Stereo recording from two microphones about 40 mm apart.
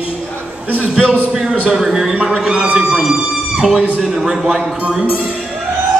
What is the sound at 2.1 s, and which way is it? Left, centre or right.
A man's voice, right.